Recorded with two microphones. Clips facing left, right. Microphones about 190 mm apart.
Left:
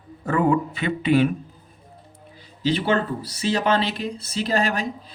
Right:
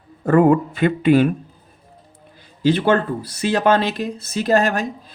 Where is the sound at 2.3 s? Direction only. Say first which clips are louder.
Right 5 dB; 50° right (ahead or behind).